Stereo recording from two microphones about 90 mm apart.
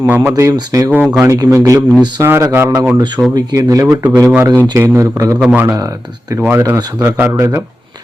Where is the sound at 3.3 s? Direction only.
40° right (ahead or behind).